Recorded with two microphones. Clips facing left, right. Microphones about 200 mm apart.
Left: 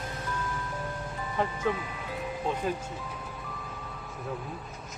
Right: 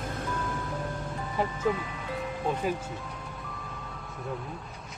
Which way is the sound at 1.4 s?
Centre (ahead or behind).